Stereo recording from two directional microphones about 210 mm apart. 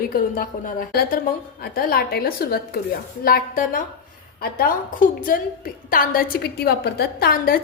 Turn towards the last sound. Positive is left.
turn(degrees=45)  # may be behind; listen again after turning